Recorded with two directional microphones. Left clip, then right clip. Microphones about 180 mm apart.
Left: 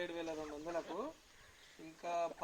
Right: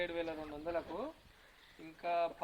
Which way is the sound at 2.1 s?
15° left (ahead or behind).